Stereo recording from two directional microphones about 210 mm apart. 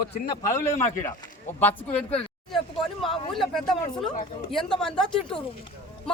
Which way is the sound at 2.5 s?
Centre (ahead or behind).